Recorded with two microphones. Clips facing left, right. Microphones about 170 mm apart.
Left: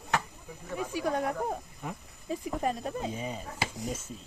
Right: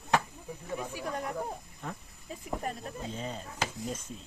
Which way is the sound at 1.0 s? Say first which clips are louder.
Left 9 dB; 75° left (ahead or behind).